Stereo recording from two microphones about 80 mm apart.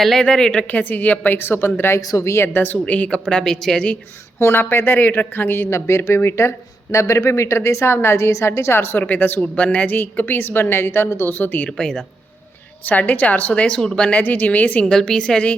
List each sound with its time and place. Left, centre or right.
0.0 s speech: centre
0.7 s a woman's voice: left
2.0 s speech: left
2.5 s a woman's voice: left
4.4 s a woman's voice: left
11.8 s speech: centre
12.8 s a woman's voice: left
14.9 s speech: centre